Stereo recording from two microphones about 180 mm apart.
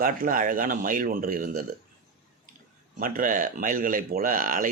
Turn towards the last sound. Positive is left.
turn(degrees=-50)  # may be behind; listen again after turning